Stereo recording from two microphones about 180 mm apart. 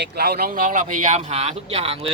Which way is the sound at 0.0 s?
60° right (ahead or behind).